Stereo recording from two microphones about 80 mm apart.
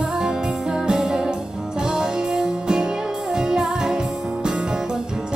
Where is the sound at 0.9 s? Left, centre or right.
Centre.